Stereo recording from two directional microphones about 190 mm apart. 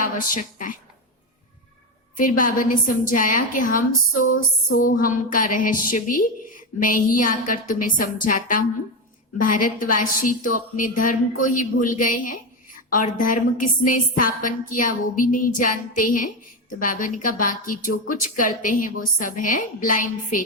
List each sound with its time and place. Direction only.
0.0 s a woman's voice: 45° left (ahead or behind)
2.1 s a woman's voice: 45° left (ahead or behind)